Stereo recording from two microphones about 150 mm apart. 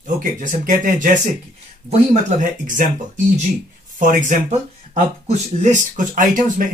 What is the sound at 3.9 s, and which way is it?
Speech, 55° right (ahead or behind).